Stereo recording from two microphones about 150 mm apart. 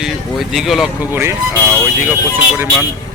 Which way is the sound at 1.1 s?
15° right (ahead or behind).